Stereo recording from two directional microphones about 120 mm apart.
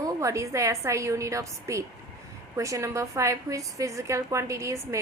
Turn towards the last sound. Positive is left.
turn(degrees=-25)  # may be behind; listen again after turning